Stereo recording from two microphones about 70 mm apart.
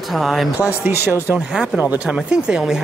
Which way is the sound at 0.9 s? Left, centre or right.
Right.